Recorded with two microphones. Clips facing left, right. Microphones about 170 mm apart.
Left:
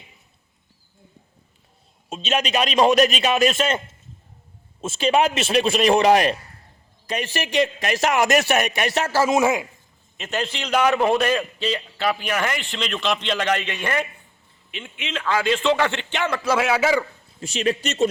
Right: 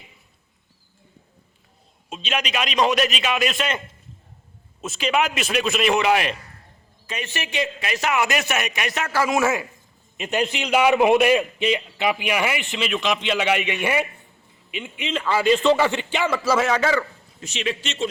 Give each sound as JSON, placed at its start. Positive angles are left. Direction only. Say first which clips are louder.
{"t": 2.0, "sound": "a man's voice", "louder": "left 3 dB", "side_deg": 45}
{"t": 4.8, "sound": "a man's voice", "louder": "left 3 dB", "side_deg": 30}
{"t": 10.2, "sound": "a man's voice", "louder": "right 3 dB", "side_deg": -10}
{"t": 17.4, "sound": "a man's voice", "louder": "left 5 dB", "side_deg": 40}